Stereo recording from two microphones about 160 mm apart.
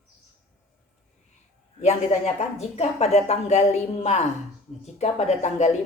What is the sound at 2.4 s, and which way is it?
Speech, 40° left (ahead or behind).